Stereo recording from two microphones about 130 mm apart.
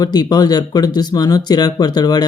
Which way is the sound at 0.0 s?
30° left (ahead or behind).